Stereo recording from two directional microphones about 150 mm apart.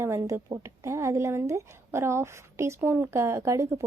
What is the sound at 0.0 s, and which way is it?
A woman's voice, 20° right (ahead or behind).